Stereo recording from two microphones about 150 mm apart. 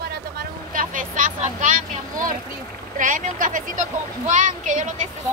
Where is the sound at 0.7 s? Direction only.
65° right (ahead or behind).